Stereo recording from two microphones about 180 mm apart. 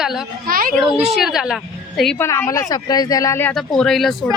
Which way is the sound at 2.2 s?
15° left (ahead or behind).